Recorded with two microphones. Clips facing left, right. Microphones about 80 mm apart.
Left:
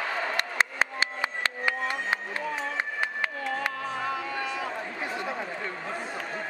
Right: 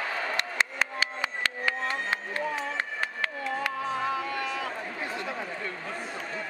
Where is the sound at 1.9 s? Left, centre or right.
Centre.